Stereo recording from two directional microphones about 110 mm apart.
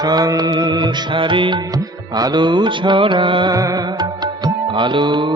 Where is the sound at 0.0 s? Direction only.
35° right (ahead or behind).